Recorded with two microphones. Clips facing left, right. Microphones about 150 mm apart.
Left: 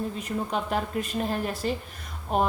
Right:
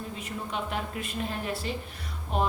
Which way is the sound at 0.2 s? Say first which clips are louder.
Left 5 dB; 40° left (ahead or behind).